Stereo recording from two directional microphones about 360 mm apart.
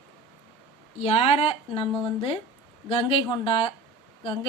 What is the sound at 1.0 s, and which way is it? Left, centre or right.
A woman's voice, centre.